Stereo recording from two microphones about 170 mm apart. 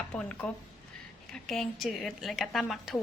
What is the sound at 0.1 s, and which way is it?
A woman's voice, 10° left (ahead or behind).